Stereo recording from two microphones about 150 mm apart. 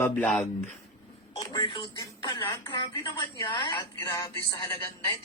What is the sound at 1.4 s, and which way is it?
A woman's voice, 25° left (ahead or behind).